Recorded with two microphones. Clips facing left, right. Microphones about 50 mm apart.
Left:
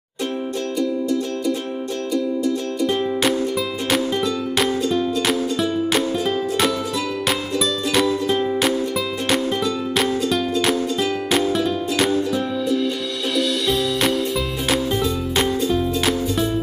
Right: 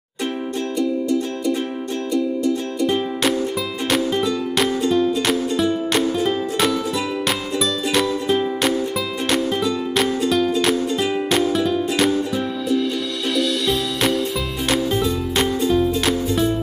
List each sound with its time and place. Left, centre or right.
2.1 s music: centre
13.4 s music: centre